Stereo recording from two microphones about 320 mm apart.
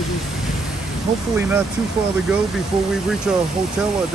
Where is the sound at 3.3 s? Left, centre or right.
Centre.